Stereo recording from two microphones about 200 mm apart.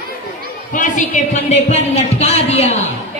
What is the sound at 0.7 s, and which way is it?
Speech, 40° left (ahead or behind).